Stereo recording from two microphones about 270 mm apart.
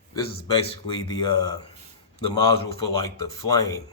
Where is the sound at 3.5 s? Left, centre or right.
Centre.